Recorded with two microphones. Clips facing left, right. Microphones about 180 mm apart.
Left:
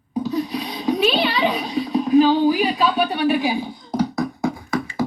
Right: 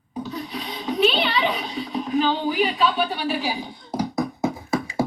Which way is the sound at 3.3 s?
15° left (ahead or behind).